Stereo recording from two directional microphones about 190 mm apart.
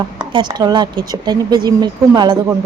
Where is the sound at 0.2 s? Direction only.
25° right (ahead or behind).